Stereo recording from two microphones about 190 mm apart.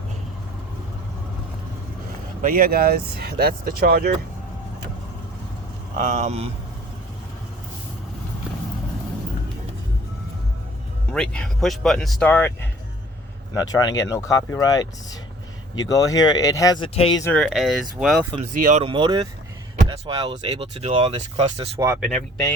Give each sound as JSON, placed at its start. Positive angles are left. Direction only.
{"t": 2.4, "sound": "speech", "side_deg": -50}
{"t": 6.0, "sound": "speech", "side_deg": -40}
{"t": 11.1, "sound": "speech", "side_deg": 5}
{"t": 17.3, "sound": "speech", "side_deg": 5}
{"t": 18.5, "sound": "speech", "side_deg": -40}
{"t": 18.9, "sound": "speech", "side_deg": -25}